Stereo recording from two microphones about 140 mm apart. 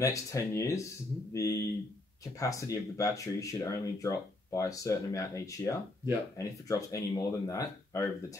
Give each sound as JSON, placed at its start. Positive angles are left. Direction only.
{"t": 0.0, "sound": "speech", "side_deg": 20}